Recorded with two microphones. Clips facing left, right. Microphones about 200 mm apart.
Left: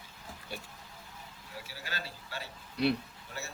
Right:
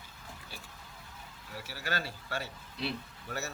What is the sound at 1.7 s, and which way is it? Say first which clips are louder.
Speech: right 7 dB; 65° right (ahead or behind).